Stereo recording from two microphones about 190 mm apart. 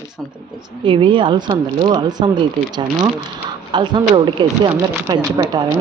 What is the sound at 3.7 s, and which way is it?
Speech, 25° right (ahead or behind).